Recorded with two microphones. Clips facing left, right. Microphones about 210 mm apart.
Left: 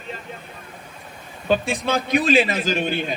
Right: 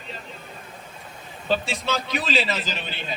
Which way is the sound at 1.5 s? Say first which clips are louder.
Left 4 dB; 50° left (ahead or behind).